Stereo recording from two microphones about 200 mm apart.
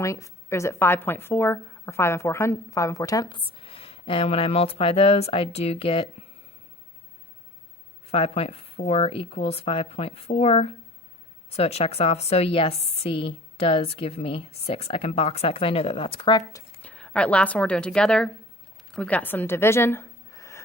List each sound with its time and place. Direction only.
0.0 s a woman's voice: 15° left (ahead or behind)
8.1 s a woman's voice: 30° left (ahead or behind)
16.9 s a woman's voice: 5° left (ahead or behind)